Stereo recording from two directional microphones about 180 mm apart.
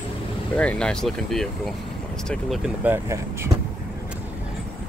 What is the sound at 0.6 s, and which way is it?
Speech, 5° left (ahead or behind).